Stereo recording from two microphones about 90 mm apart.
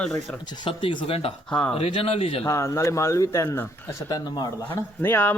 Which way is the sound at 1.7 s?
90° left.